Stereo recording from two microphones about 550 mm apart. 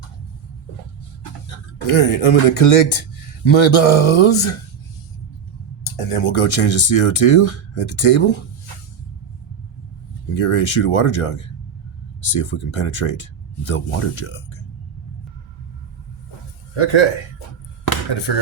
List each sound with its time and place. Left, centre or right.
1.5 s speech: left
3.4 s speech: left
5.8 s speech: left
10.4 s speech: left
16.7 s speech: left
18.3 s speech: left